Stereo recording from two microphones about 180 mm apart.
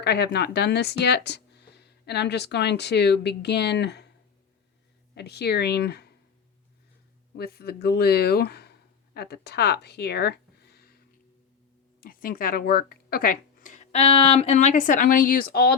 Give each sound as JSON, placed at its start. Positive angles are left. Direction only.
{"t": 0.0, "sound": "speech", "side_deg": 70}
{"t": 5.1, "sound": "speech", "side_deg": 65}
{"t": 7.3, "sound": "speech", "side_deg": 60}
{"t": 11.9, "sound": "speech", "side_deg": 50}